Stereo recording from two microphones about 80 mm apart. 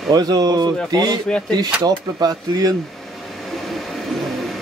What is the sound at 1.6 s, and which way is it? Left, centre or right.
Speech, right.